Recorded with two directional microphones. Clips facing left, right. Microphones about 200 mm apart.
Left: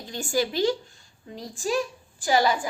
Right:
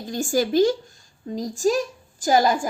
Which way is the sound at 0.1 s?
45° right (ahead or behind).